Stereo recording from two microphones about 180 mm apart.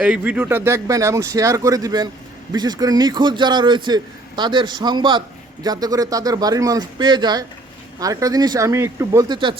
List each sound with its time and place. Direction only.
0.0 s a man's voice: 5° right (ahead or behind); by 9.6 s 25° right (ahead or behind)